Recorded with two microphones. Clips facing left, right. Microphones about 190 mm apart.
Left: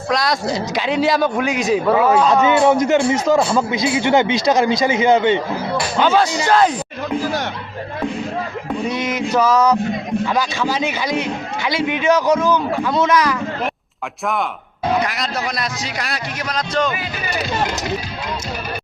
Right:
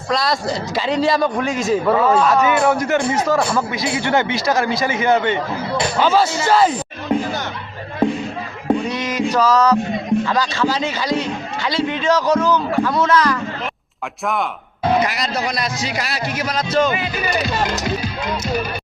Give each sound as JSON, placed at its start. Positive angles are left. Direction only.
{"t": 0.1, "sound": "a man's voice", "side_deg": 0}
{"t": 2.2, "sound": "speech", "side_deg": 20}
{"t": 6.0, "sound": "a man's voice", "side_deg": -5}
{"t": 9.0, "sound": "a man's voice", "side_deg": 10}
{"t": 15.0, "sound": "a man's voice", "side_deg": 0}